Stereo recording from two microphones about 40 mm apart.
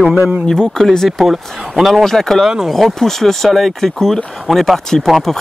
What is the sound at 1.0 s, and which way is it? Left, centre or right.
Speech, centre.